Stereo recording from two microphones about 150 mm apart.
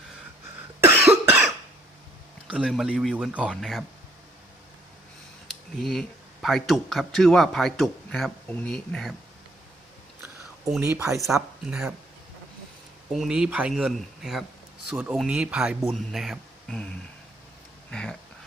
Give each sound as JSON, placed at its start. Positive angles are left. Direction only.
{"t": 0.8, "sound": "cough", "side_deg": -15}
{"t": 2.5, "sound": "speech", "side_deg": -5}
{"t": 5.5, "sound": "speech", "side_deg": 0}
{"t": 10.8, "sound": "speech", "side_deg": -15}
{"t": 11.6, "sound": "speech", "side_deg": -5}
{"t": 13.1, "sound": "speech", "side_deg": -5}
{"t": 17.9, "sound": "speech", "side_deg": 5}